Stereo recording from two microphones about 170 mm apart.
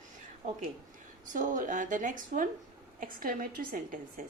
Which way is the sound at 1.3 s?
50° right (ahead or behind).